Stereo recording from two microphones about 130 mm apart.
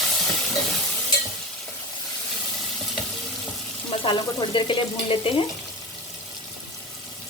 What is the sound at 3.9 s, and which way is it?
Speech, 40° left (ahead or behind).